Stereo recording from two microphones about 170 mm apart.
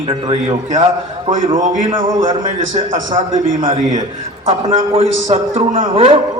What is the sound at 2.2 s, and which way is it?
Speech, 50° right (ahead or behind).